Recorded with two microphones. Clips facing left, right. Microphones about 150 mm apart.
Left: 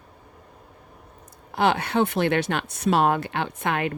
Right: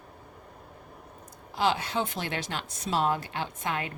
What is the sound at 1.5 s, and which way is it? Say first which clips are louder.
Speech: left 5 dB; 60° left (ahead or behind).